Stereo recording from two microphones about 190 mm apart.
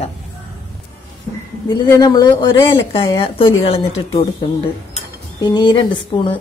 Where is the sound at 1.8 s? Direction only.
20° left (ahead or behind).